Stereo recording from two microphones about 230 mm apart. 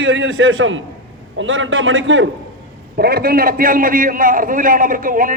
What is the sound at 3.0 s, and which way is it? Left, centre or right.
A man's voice, right.